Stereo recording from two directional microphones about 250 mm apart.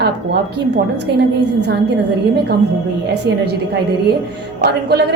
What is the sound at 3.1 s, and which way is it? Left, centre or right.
Speech, right.